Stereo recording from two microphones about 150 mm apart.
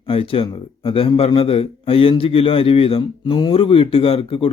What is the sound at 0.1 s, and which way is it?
A man's voice, 35° left (ahead or behind).